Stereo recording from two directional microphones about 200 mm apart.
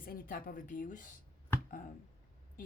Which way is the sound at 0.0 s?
45° left (ahead or behind).